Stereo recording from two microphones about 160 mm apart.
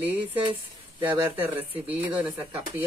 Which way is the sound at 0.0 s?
10° right (ahead or behind).